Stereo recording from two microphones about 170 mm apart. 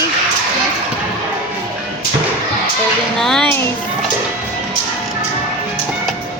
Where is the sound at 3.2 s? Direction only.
Centre (ahead or behind).